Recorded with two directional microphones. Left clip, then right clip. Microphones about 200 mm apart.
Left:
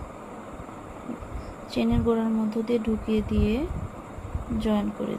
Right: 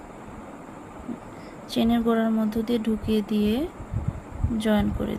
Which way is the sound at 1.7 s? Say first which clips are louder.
Right 2 dB; 25° right (ahead or behind).